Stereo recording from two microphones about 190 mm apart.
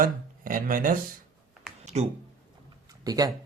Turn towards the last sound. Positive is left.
turn(degrees=-20)  # may be behind; listen again after turning